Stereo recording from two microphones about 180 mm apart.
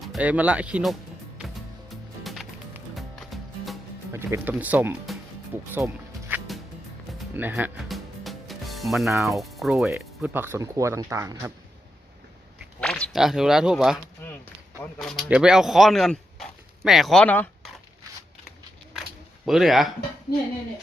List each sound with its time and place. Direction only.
0.0 s speech: 5° right (ahead or behind)
1.9 s music: centre (ahead or behind)
4.1 s speech: 15° right (ahead or behind)
5.7 s music: 10° right (ahead or behind)
9.1 s speech: centre (ahead or behind)
10.3 s speech: 15° right (ahead or behind)
12.8 s speech: 5° left (ahead or behind)
14.2 s a sound: 10° left (ahead or behind)
14.9 s speech: centre (ahead or behind)
19.5 s speech: centre (ahead or behind)